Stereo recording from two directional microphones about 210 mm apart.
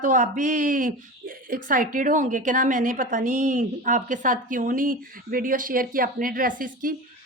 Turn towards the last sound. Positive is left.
turn(degrees=-40)  # may be behind; listen again after turning